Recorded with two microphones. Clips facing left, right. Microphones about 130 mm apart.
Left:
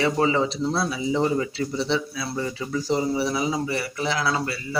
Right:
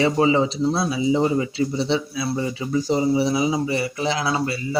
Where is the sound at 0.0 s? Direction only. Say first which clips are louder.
Right 3 dB; 20° right (ahead or behind).